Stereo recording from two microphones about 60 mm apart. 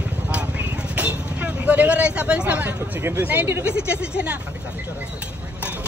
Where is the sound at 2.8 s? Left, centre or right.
Right.